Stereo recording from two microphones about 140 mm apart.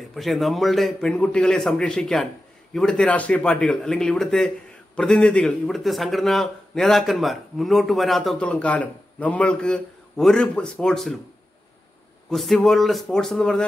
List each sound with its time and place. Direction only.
0.1 s speech: centre (ahead or behind)
12.3 s speech: centre (ahead or behind)